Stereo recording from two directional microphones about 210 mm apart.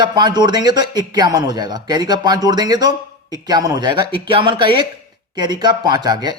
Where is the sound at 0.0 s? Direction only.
20° right (ahead or behind).